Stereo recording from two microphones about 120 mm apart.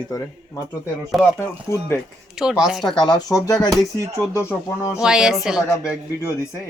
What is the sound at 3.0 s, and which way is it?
Speech, 35° left (ahead or behind).